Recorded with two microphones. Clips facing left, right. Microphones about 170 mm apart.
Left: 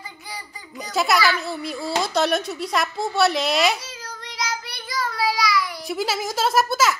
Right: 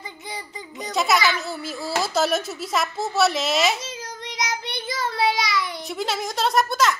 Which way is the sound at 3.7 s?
20° right (ahead or behind).